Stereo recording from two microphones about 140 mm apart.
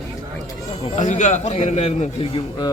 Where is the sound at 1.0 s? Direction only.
60° left (ahead or behind).